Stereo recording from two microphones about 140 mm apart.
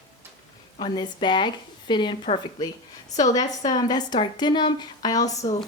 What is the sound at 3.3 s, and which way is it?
A woman's voice, 25° left (ahead or behind).